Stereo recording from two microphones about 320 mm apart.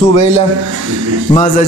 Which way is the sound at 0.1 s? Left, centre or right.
Right.